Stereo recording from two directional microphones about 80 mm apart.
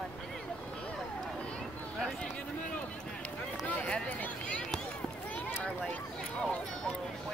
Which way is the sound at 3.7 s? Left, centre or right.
Centre.